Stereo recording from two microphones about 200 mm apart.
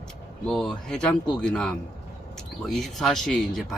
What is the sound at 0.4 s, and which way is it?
Speech, centre (ahead or behind).